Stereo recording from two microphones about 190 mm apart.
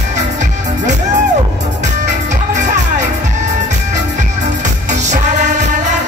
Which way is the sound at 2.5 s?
40° right (ahead or behind).